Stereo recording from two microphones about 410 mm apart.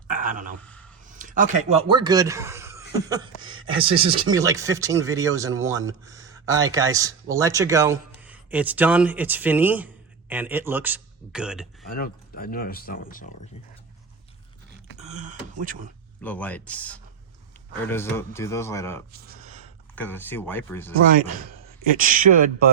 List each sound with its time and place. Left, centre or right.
0.1 s a sound: centre
0.6 s a sound: centre
1.2 s speech: centre
3.4 s speech: right
3.8 s a man's voice: centre
11.9 s speech: left
14.9 s speech: centre
16.2 s speech: centre
21.9 s speech: centre